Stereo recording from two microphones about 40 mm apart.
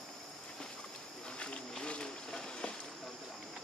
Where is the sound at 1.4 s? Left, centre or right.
Left.